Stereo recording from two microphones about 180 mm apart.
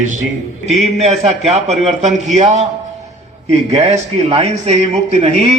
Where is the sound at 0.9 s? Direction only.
35° right (ahead or behind).